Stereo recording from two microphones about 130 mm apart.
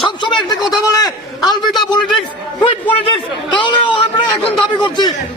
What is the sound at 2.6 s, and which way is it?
A man's voice, 40° left (ahead or behind).